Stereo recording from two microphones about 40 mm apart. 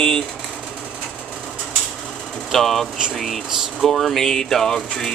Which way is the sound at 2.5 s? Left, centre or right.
Centre.